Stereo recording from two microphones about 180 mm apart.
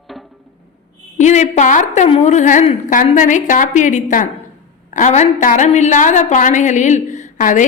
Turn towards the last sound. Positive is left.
turn(degrees=45)  # may be behind; listen again after turning